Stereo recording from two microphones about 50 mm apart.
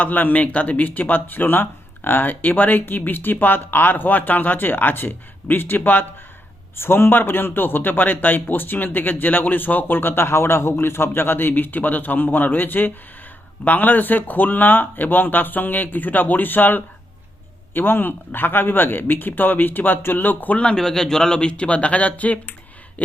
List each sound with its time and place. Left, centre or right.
0.0 s speech: left
6.7 s a man's voice: left
20.7 s speech: centre; by 23.1 s left